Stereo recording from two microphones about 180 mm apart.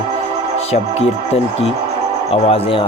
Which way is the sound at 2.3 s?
30° left (ahead or behind).